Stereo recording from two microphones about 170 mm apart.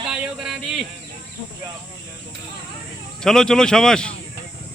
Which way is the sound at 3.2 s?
5° left (ahead or behind).